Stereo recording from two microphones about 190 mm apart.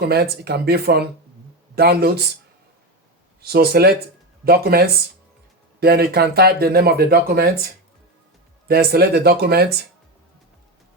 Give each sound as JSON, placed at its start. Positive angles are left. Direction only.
{"t": 0.0, "sound": "speech", "side_deg": -55}
{"t": 3.4, "sound": "speech", "side_deg": -55}